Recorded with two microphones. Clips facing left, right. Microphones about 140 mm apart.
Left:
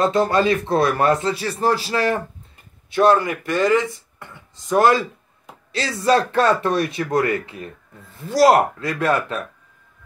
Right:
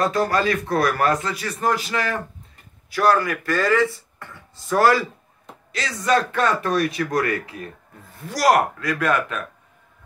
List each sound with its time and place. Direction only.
0.0 s speech: 25° left (ahead or behind)
5.7 s speech: 30° left (ahead or behind)